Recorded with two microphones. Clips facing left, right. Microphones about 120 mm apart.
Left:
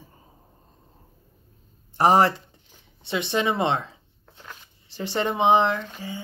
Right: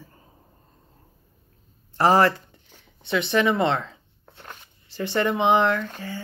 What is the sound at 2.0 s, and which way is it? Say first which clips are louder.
Speech: even; 20° left (ahead or behind).